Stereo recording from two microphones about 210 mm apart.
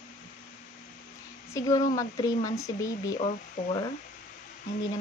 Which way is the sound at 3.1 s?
30° left (ahead or behind).